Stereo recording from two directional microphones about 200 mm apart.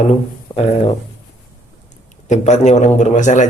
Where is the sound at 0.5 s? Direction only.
20° left (ahead or behind).